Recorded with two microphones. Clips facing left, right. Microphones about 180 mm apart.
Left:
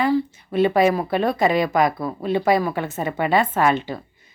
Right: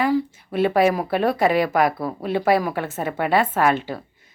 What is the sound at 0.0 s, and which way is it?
A woman's voice, 10° right (ahead or behind).